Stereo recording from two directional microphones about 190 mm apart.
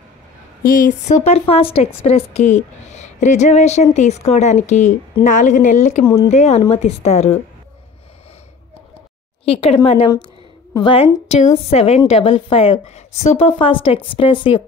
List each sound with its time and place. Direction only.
0.7 s speech: 45° left (ahead or behind)
9.4 s a woman's voice: 30° left (ahead or behind)